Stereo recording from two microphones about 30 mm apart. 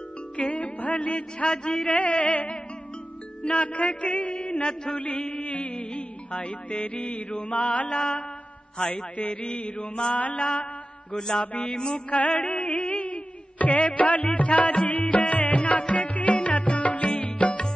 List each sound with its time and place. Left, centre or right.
0.4 s music: left
1.7 s a man's voice: left
5.2 s music: left
7.3 s a man's voice: left
7.9 s mantra: left
10.1 s mantra: left
11.1 s mantra: left
12.1 s music: left